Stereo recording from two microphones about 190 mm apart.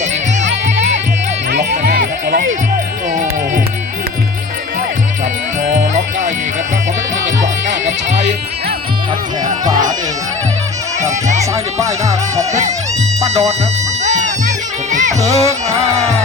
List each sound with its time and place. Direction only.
1.5 s music: 40° right (ahead or behind)
5.6 s music: 40° right (ahead or behind)
7.4 s music: 40° right (ahead or behind)
11.5 s speech: 15° right (ahead or behind)
13.2 s music: 35° right (ahead or behind)
15.3 s speech: 15° right (ahead or behind)